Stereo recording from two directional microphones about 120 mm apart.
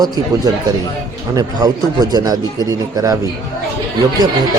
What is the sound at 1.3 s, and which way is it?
Speech, 30° right (ahead or behind).